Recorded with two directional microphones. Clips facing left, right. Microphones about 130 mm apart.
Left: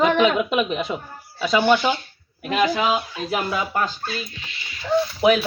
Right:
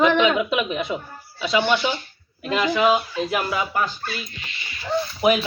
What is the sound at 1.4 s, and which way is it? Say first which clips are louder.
Speech: left 3 dB; 45° left (ahead or behind).